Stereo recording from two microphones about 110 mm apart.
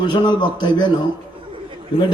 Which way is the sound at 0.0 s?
45° left (ahead or behind).